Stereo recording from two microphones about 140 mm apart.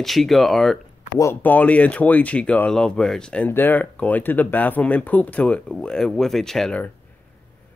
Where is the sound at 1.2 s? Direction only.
15° left (ahead or behind).